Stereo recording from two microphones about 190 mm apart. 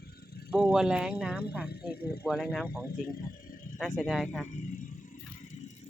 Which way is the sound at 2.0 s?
55° left (ahead or behind).